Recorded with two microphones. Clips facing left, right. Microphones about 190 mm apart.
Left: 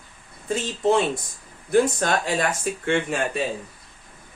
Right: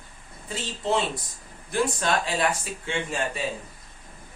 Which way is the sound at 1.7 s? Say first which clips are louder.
Left 5 dB; 45° left (ahead or behind).